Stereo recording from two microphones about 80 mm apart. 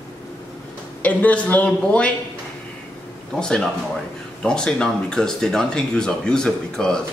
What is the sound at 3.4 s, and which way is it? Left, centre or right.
Speech, centre.